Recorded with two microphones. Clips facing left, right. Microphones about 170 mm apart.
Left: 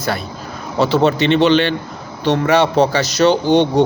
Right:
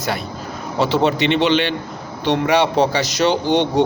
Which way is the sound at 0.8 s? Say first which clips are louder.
Left 3 dB; 15° right (ahead or behind).